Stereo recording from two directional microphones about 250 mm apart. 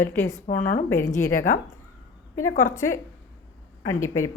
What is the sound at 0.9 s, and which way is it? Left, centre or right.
Speech, centre.